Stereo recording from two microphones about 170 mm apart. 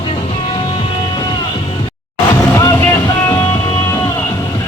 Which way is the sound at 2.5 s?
15° left (ahead or behind).